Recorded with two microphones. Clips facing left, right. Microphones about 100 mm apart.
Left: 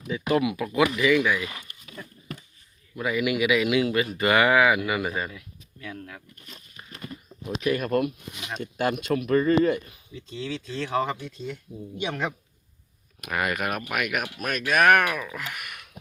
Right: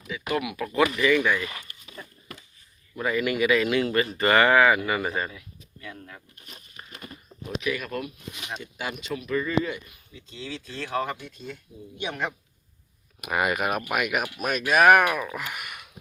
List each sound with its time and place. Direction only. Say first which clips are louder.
0.1 s speech: left 5 dB; 25° left (ahead or behind)
0.6 s speech: even; 10° left (ahead or behind)
6.7 s a sound: left 2 dB; 10° right (ahead or behind)
7.6 s speech: left 7 dB; 45° left (ahead or behind)
10.3 s speech: left 4 dB; 10° right (ahead or behind)
13.2 s speech: right 2 dB; 10° right (ahead or behind)